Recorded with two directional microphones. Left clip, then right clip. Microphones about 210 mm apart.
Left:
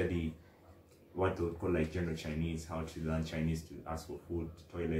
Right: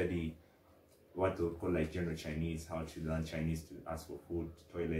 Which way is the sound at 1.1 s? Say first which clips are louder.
Even; centre (ahead or behind).